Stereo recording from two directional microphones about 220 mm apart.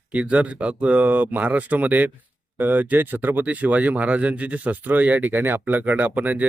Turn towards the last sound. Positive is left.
turn(degrees=-5)  # may be behind; listen again after turning